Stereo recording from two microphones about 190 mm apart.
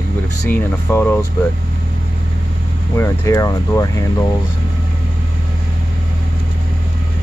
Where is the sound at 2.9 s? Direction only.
15° left (ahead or behind).